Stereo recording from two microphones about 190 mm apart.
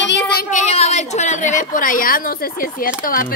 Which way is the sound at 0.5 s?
35° left (ahead or behind).